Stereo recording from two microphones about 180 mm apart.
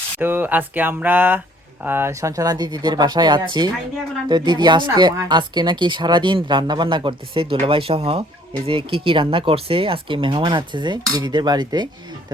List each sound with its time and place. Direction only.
0.2 s speech: 10° right (ahead or behind)